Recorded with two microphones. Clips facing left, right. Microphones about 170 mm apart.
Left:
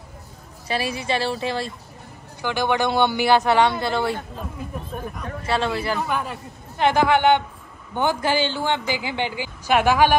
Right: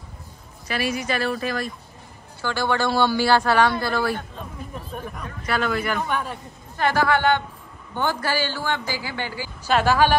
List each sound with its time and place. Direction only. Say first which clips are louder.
0.7 s a man's voice: left 1 dB; 30° left (ahead or behind)
5.5 s a man's voice: left 1 dB; 30° left (ahead or behind)
6.0 s a man's voice: left 1 dB; 5° left (ahead or behind)
6.8 s a man's voice: left 3 dB; 20° left (ahead or behind)